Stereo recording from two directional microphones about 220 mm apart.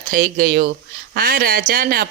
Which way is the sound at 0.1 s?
40° right (ahead or behind).